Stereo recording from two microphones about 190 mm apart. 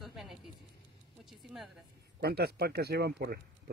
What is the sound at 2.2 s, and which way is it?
Speech, 55° right (ahead or behind).